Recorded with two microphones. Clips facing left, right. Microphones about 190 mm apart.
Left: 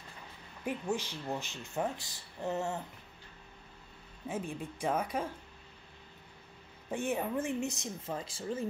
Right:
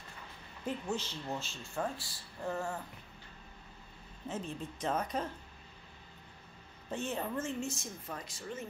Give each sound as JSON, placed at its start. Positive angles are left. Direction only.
{"t": 0.7, "sound": "speech", "side_deg": 15}
{"t": 4.3, "sound": "speech", "side_deg": 10}
{"t": 6.9, "sound": "speech", "side_deg": 10}